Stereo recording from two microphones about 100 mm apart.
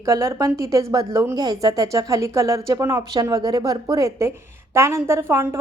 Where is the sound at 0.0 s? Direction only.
30° right (ahead or behind).